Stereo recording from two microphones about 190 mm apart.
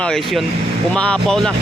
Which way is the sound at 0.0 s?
Centre (ahead or behind).